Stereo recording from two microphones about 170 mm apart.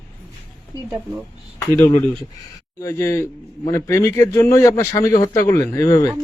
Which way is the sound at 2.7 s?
15° left (ahead or behind).